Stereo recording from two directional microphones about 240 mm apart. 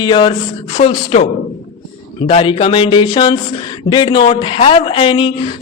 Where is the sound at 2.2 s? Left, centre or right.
Left.